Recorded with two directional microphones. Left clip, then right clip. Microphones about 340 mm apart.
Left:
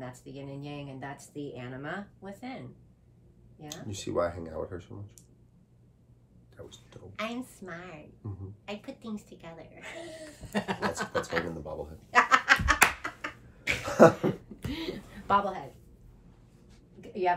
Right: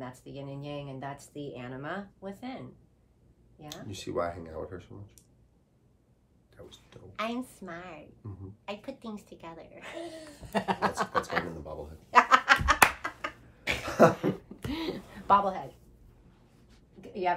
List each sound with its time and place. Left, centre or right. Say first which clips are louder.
0.0 s speech: right 1 dB; centre
3.6 s speech: left 1 dB; centre
6.5 s speech: left 2 dB; centre
7.2 s speech: right 2 dB; centre
8.2 s speech: left 3 dB; centre
8.6 s speech: right 1 dB; centre
11.6 s speech: left 3 dB; centre
12.1 s a sound: right 1 dB; centre
13.8 s a sound: left 3 dB; centre
14.6 s a sound: right 2 dB; centre
17.0 s dog: left 2 dB; centre